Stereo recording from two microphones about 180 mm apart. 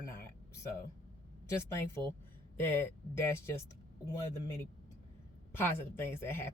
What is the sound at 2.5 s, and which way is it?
Speech, 10° left (ahead or behind).